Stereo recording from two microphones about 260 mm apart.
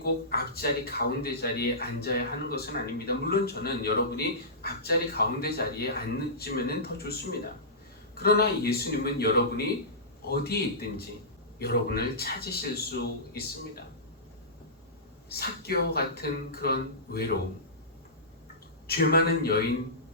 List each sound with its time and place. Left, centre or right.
0.0 s speech: left
15.3 s speech: left
18.9 s speech: left